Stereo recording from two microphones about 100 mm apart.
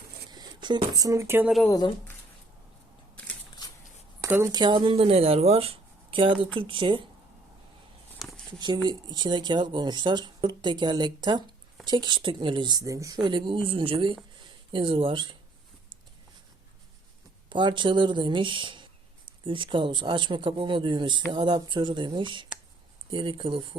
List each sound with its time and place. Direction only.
0.3 s speech: 45° right (ahead or behind); by 1.4 s 30° right (ahead or behind)
4.3 s speech: 25° right (ahead or behind)
4.5 s speech: 50° right (ahead or behind)
8.5 s a woman's voice: 45° right (ahead or behind)
17.5 s a woman's voice: 50° right (ahead or behind)